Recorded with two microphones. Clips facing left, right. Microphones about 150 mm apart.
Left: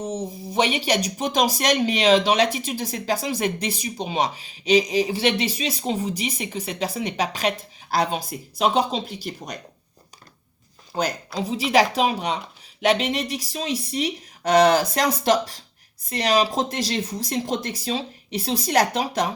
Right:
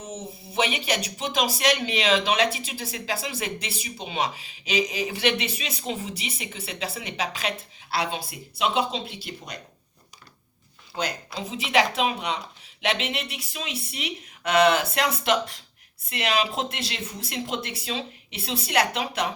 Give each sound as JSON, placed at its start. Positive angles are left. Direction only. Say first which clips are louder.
{"t": 0.0, "sound": "speech", "louder": "left 8 dB", "side_deg": 35}
{"t": 10.9, "sound": "speech", "louder": "left 5 dB", "side_deg": 40}